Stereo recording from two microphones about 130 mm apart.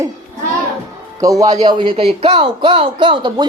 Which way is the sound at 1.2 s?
25° right (ahead or behind).